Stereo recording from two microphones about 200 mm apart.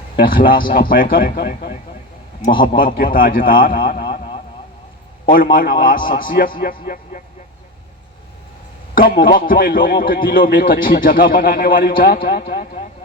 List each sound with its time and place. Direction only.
0.2 s a man's voice: 45° left (ahead or behind)
5.5 s a man's voice: 45° left (ahead or behind)
9.0 s a man's voice: 45° left (ahead or behind)